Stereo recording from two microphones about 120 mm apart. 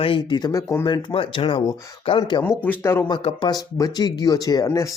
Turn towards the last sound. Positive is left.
turn(degrees=25)  # may be behind; listen again after turning